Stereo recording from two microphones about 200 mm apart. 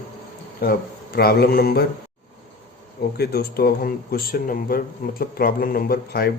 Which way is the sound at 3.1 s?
55° left (ahead or behind).